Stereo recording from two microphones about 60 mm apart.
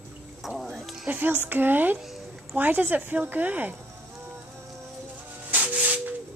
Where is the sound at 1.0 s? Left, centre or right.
Right.